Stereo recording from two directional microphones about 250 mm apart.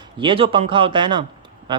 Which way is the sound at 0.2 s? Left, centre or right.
Right.